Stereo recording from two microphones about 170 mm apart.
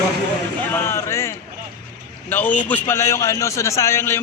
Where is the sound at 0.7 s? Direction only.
15° left (ahead or behind).